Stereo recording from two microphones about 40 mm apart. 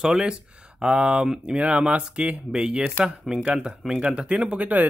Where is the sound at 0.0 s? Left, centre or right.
Centre.